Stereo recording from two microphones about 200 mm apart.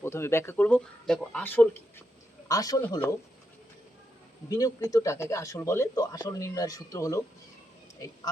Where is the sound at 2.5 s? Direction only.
20° left (ahead or behind).